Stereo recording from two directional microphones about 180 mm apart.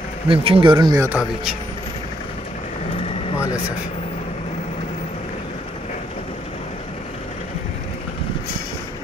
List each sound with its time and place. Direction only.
0.3 s speech: 30° right (ahead or behind)